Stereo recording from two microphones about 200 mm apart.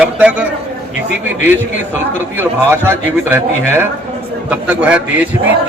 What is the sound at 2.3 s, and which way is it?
A man's voice, 10° right (ahead or behind).